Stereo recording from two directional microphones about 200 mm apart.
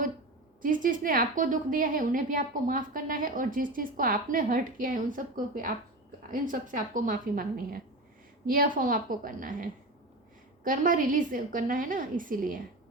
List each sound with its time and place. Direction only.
0.6 s a woman's voice: 40° right (ahead or behind)